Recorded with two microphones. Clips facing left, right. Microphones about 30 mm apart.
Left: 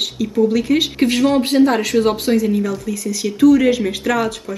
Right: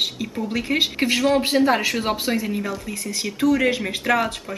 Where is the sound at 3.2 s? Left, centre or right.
Centre.